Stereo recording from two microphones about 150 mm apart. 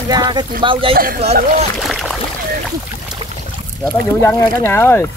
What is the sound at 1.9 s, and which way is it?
Boat, centre (ahead or behind).